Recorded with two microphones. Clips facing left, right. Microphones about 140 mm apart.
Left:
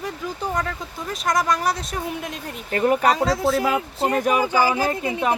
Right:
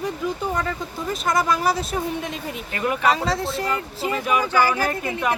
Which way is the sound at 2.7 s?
40° left (ahead or behind).